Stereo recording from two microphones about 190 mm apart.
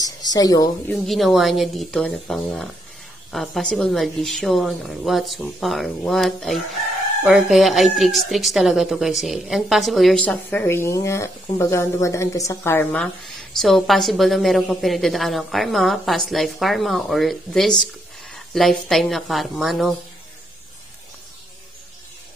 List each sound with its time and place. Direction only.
0.0 s speech: 20° left (ahead or behind)
1.0 s speech: centre (ahead or behind)